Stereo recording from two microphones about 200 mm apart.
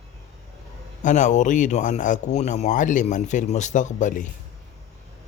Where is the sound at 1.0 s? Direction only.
40° left (ahead or behind).